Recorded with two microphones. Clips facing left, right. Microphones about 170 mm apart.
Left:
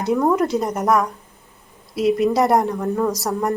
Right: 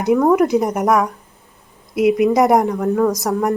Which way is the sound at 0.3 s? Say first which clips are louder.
Right 4 dB; 15° right (ahead or behind).